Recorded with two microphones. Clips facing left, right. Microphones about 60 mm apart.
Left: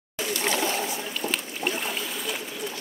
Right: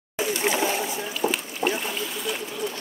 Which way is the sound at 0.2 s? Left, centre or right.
Centre.